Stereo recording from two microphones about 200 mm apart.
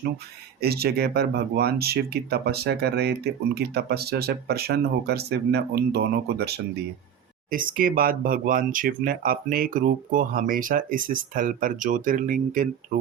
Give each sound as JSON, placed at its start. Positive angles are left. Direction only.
{"t": 0.6, "sound": "speech", "side_deg": -50}